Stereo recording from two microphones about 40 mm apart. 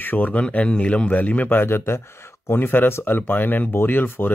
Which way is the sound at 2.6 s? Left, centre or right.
Left.